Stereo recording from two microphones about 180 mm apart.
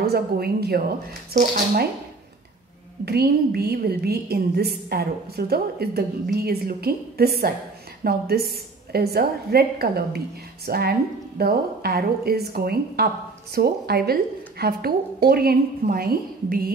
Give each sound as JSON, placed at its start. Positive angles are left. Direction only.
{"t": 0.0, "sound": "a woman's voice", "side_deg": -60}
{"t": 3.1, "sound": "a woman's voice", "side_deg": -60}